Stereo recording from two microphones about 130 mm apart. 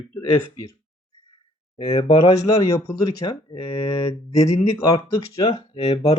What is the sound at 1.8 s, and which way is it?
Speech, 50° left (ahead or behind).